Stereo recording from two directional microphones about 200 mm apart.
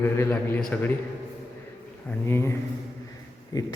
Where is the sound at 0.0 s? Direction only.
10° left (ahead or behind).